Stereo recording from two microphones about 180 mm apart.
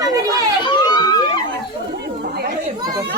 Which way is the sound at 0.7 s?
25° left (ahead or behind).